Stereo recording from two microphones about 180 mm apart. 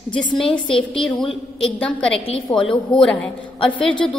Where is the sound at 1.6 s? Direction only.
5° left (ahead or behind).